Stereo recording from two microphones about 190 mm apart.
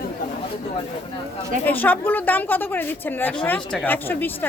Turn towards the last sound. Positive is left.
turn(degrees=10)  # may be behind; listen again after turning